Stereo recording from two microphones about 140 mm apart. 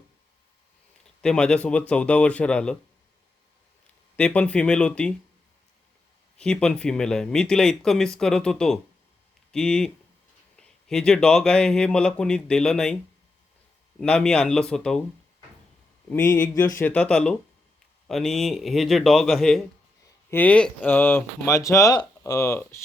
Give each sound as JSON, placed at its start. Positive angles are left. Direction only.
{"t": 1.2, "sound": "speech", "side_deg": 5}
{"t": 4.2, "sound": "speech", "side_deg": 10}
{"t": 6.3, "sound": "speech", "side_deg": 5}
{"t": 14.0, "sound": "speech", "side_deg": 5}
{"t": 16.0, "sound": "speech", "side_deg": 10}